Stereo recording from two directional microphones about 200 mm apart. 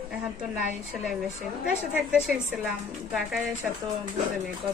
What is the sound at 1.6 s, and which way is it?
Speech, 5° right (ahead or behind).